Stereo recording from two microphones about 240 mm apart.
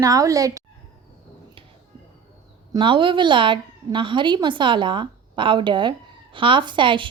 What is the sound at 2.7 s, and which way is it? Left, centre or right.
A woman's voice, centre.